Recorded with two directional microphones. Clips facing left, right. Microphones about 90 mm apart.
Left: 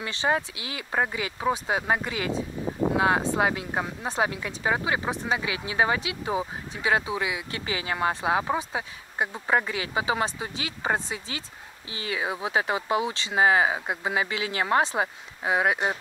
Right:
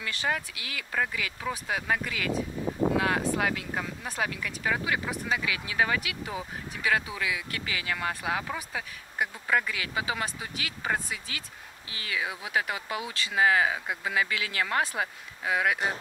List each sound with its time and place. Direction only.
0.0 s speech: 25° left (ahead or behind)